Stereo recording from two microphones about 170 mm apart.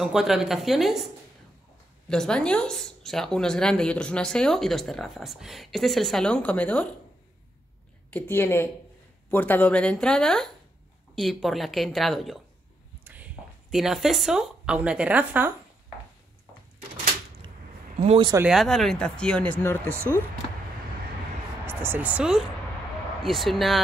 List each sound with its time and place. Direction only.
0.0 s speech: centre (ahead or behind)
2.0 s speech: 5° left (ahead or behind)
8.1 s speech: 15° left (ahead or behind); by 15.5 s 10° right (ahead or behind)
17.9 s speech: 35° right (ahead or behind)
18.5 s speech: centre (ahead or behind)
21.6 s speech: 10° right (ahead or behind)